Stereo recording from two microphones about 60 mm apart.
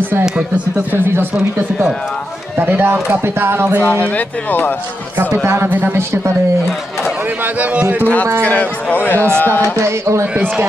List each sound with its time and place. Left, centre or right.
1.3 s speech: centre
2.5 s speech: right
4.0 s a man's voice: left
5.4 s speech: right
5.7 s a man's voice: right
7.4 s a man's voice: right
8.4 s a man's voice: left
9.8 s speech: right